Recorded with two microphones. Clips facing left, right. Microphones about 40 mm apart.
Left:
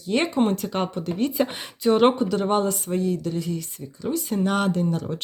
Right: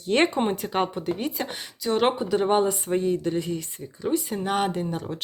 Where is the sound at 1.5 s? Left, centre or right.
Left.